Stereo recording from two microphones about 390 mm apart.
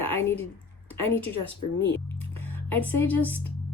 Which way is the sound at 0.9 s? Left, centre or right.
Centre.